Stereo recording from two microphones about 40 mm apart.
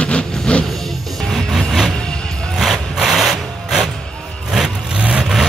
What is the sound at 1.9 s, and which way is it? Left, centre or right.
Music, left.